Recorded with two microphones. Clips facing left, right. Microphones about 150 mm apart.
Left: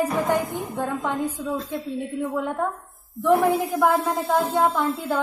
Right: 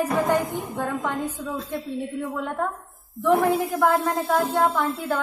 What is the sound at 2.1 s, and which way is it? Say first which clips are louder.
A woman's voice: left 4 dB; 20° left (ahead or behind).